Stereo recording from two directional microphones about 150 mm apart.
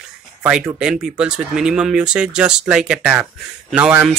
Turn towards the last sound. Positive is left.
turn(degrees=-5)  # may be behind; listen again after turning